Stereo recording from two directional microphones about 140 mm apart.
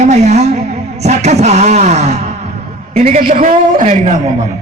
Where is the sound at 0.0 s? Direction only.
55° right (ahead or behind).